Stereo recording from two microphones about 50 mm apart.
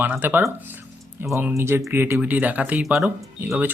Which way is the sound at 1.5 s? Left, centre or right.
Right.